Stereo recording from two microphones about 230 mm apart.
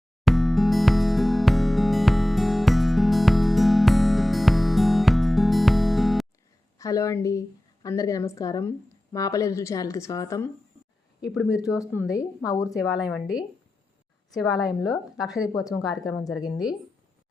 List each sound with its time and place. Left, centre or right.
0.3 s music: centre
6.7 s a woman's voice: centre
11.2 s speech: centre
11.8 s a woman's voice: centre
14.5 s a woman's voice: centre
14.8 s speech: centre